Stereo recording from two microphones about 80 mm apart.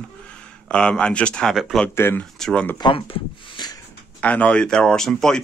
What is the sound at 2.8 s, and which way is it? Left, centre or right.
Speech, left.